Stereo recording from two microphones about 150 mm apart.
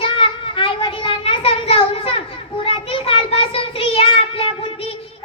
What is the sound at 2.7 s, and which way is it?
Child singing, 35° left (ahead or behind).